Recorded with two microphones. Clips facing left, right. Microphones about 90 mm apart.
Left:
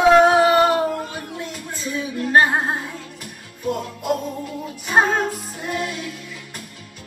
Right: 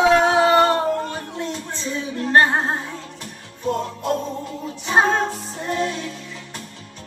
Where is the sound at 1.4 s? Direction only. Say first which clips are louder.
Right 2 dB; 30° right (ahead or behind).